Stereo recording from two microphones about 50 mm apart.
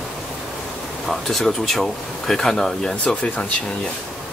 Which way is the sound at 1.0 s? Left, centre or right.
Centre.